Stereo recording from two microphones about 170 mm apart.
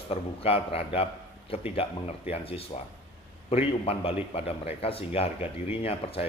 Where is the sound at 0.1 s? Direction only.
35° left (ahead or behind).